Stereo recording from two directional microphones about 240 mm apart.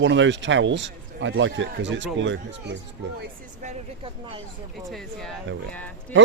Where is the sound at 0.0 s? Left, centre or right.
Right.